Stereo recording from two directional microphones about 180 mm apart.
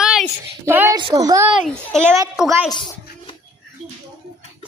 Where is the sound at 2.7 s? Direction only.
25° left (ahead or behind).